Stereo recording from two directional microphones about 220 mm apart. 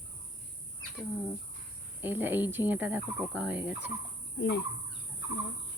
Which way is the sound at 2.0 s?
10° right (ahead or behind).